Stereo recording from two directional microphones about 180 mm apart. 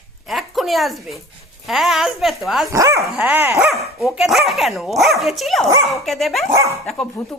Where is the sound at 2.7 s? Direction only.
15° right (ahead or behind).